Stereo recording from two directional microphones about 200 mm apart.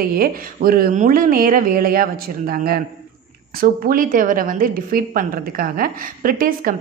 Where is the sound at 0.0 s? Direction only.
50° right (ahead or behind).